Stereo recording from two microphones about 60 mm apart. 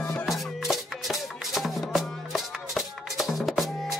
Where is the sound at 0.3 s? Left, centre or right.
Centre.